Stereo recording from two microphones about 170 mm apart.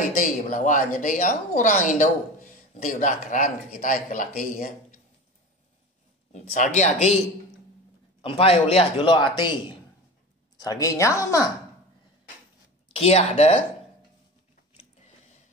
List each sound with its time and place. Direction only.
0.2 s a woman's voice: 50° left (ahead or behind)
6.3 s a woman's voice: 50° left (ahead or behind)
8.2 s a man's voice: 35° left (ahead or behind); by 11.4 s 15° left (ahead or behind)
12.9 s a man's voice: 35° left (ahead or behind)